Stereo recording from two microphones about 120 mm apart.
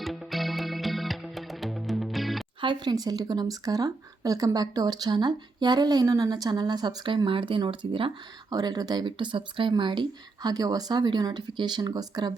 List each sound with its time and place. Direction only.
0.0 s music: centre (ahead or behind)
2.6 s speech: 40° right (ahead or behind)
8.4 s speech: 35° right (ahead or behind)